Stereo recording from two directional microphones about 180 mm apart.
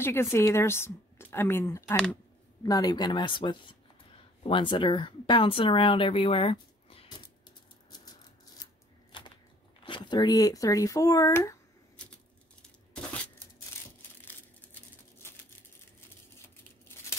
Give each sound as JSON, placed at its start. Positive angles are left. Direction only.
{"t": 0.0, "sound": "speech", "side_deg": 15}
{"t": 9.8, "sound": "speech", "side_deg": 25}
{"t": 12.9, "sound": "a sound", "side_deg": 5}